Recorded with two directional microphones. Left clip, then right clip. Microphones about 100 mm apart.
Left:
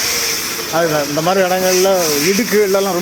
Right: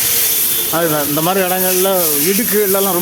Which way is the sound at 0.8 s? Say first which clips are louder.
Left 1 dB; 45° right (ahead or behind).